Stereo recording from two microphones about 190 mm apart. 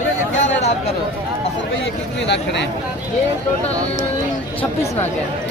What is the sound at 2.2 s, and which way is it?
Speech, 65° left (ahead or behind).